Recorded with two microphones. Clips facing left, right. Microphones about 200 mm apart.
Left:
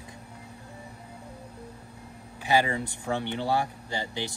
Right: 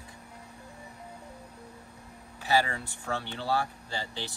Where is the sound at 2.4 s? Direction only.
15° left (ahead or behind).